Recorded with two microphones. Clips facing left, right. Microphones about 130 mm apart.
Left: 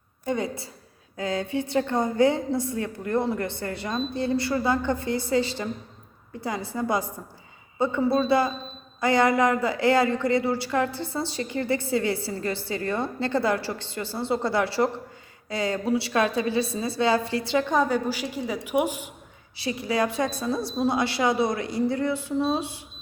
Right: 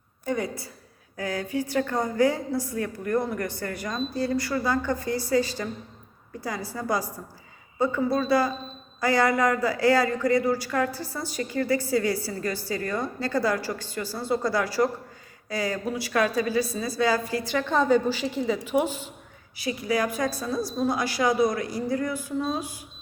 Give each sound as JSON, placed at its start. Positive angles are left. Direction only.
{"t": 0.3, "sound": "speech", "side_deg": 25}
{"t": 19.5, "sound": "speech", "side_deg": 30}